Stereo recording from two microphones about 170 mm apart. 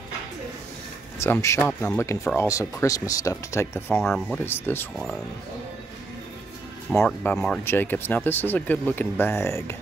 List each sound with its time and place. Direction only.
1.2 s speech: 15° left (ahead or behind)
4.0 s speech: centre (ahead or behind)
4.5 s speech: 15° left (ahead or behind)
7.1 s speech: 5° left (ahead or behind)